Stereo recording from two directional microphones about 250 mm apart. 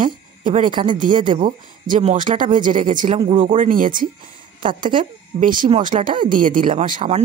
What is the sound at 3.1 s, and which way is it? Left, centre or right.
Speech, centre.